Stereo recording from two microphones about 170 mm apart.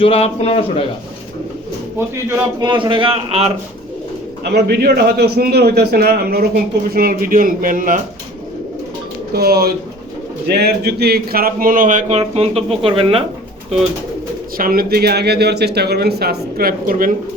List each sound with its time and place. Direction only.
0.0 s a man's voice: 35° left (ahead or behind)
2.3 s a man's voice: 25° right (ahead or behind)
4.5 s speech: 70° right (ahead or behind); by 8.0 s 55° right (ahead or behind)
9.3 s a man's voice: 65° right (ahead or behind); by 13.2 s 35° right (ahead or behind)
14.6 s speech: 60° right (ahead or behind)